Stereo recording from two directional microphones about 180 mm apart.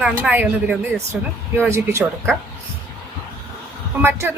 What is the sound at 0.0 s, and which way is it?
Speech, 5° right (ahead or behind).